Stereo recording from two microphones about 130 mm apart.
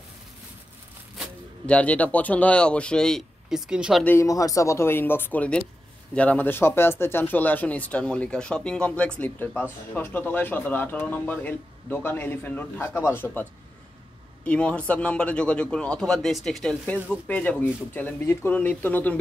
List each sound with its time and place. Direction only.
1.7 s speech: 10° left (ahead or behind)
4.0 s speech: 20° left (ahead or behind)